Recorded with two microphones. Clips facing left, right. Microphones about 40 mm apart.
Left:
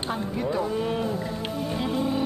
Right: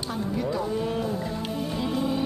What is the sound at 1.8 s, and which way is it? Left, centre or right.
Music, left.